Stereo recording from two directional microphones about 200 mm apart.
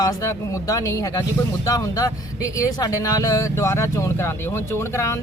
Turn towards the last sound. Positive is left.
turn(degrees=15)  # may be behind; listen again after turning